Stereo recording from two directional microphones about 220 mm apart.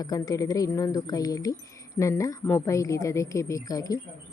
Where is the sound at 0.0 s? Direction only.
15° left (ahead or behind).